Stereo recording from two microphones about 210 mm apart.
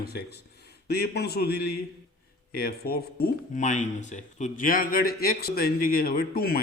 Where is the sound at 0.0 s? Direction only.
50° left (ahead or behind).